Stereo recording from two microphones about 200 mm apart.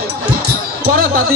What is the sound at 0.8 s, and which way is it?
Speech, 45° right (ahead or behind).